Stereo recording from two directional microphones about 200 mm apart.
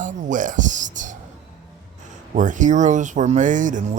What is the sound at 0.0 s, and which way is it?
Music, 40° right (ahead or behind).